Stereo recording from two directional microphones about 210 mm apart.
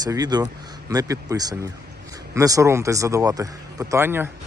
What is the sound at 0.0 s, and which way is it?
A man's voice, 20° right (ahead or behind).